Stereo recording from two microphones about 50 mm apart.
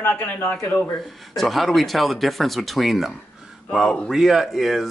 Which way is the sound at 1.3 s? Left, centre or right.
Centre.